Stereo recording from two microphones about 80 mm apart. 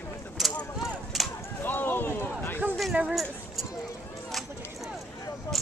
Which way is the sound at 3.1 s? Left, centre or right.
Centre.